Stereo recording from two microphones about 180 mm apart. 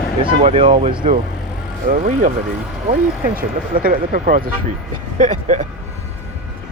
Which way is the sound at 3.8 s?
50° right (ahead or behind).